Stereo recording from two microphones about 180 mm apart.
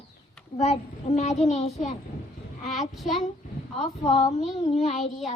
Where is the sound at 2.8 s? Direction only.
Centre (ahead or behind).